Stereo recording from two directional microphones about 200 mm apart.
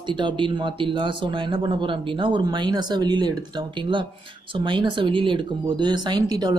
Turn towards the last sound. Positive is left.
turn(degrees=-20)  # may be behind; listen again after turning